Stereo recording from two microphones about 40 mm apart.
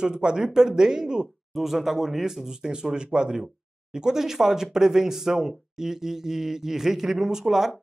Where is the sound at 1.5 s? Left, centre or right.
Centre.